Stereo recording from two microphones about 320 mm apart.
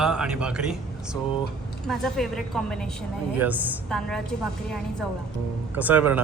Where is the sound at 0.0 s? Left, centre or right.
Centre.